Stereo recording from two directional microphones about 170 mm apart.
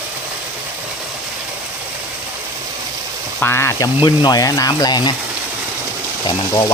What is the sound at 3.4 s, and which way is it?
Speech, 15° left (ahead or behind).